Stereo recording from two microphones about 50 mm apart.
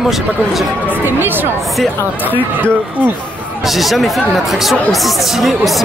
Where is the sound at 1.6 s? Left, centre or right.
Centre.